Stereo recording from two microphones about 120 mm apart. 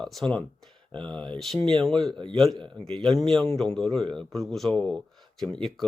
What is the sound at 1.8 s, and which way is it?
Speech, 5° left (ahead or behind).